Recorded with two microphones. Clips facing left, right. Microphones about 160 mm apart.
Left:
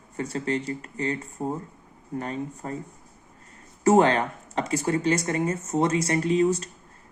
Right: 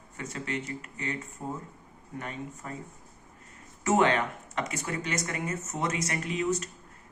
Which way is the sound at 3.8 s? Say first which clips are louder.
Left 6 dB; 35° left (ahead or behind).